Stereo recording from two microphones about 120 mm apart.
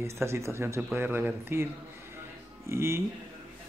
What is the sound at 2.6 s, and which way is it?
Speech, 20° right (ahead or behind).